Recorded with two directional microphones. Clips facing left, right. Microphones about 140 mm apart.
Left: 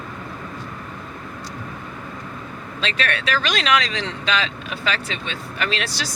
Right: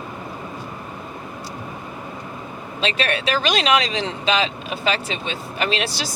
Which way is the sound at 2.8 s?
25° right (ahead or behind).